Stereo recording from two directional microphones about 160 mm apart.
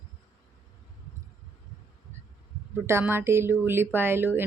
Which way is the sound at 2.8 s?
15° right (ahead or behind).